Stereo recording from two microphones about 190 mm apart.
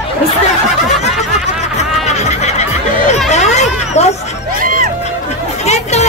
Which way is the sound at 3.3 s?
35° left (ahead or behind).